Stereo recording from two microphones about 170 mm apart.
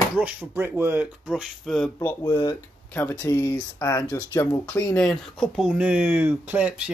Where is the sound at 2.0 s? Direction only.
15° left (ahead or behind).